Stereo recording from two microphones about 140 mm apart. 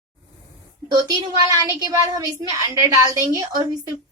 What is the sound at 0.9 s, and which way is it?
A woman's voice, 30° right (ahead or behind).